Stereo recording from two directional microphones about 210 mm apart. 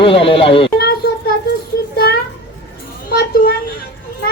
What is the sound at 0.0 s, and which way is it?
Speech, 25° left (ahead or behind).